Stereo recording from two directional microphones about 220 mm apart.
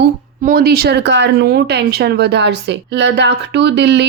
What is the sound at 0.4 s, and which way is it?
Speech, 45° right (ahead or behind).